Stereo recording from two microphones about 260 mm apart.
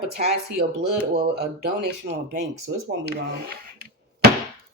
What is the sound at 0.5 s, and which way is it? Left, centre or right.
Speech, right.